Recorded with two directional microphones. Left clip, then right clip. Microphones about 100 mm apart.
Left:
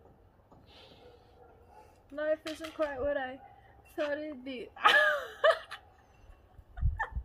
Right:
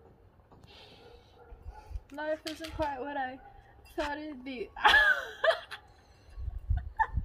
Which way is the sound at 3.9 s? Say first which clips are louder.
Left 1 dB; 10° left (ahead or behind).